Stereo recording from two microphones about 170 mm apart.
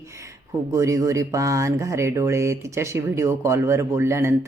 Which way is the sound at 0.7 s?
20° right (ahead or behind).